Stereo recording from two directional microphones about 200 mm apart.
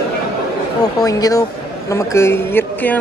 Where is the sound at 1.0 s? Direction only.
20° left (ahead or behind).